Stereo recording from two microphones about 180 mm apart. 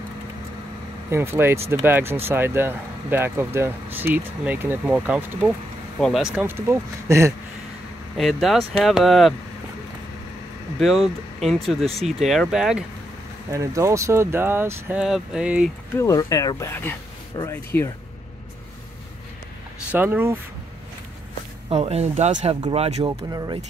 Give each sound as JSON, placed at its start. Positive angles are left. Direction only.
{"t": 1.1, "sound": "speech", "side_deg": -15}
{"t": 5.9, "sound": "speech", "side_deg": 0}
{"t": 8.2, "sound": "speech", "side_deg": 0}
{"t": 10.8, "sound": "speech", "side_deg": 0}
{"t": 13.5, "sound": "speech", "side_deg": -15}
{"t": 15.9, "sound": "speech", "side_deg": 15}
{"t": 17.7, "sound": "speech", "side_deg": 10}
{"t": 19.9, "sound": "speech", "side_deg": -10}
{"t": 21.6, "sound": "speech", "side_deg": -35}
{"t": 23.0, "sound": "speech", "side_deg": -20}